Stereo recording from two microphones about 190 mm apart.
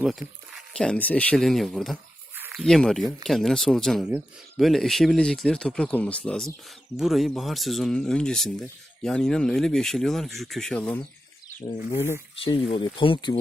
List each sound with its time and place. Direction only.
0.0 s speech: centre (ahead or behind)
2.3 s a sound: 10° right (ahead or behind)
2.6 s speech: centre (ahead or behind)
12.5 s speech: 30° left (ahead or behind)